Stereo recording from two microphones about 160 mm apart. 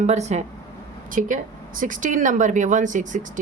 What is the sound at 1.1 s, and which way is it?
Speech, 55° right (ahead or behind).